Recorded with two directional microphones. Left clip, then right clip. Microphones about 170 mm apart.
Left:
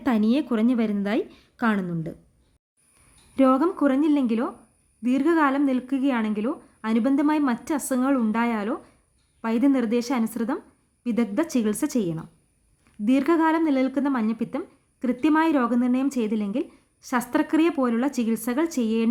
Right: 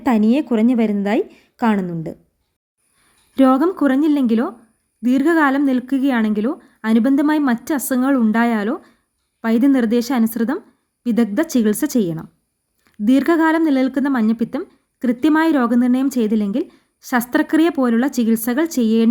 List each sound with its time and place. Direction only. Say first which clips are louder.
0.8 s a woman's voice: right 7 dB; 15° right (ahead or behind)
3.3 s a woman's voice: right 5 dB; 30° right (ahead or behind)